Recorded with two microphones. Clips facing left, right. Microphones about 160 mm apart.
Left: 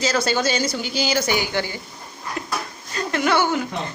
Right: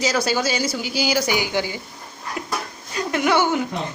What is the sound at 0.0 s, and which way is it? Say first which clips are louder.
Speech: even; 10° right (ahead or behind).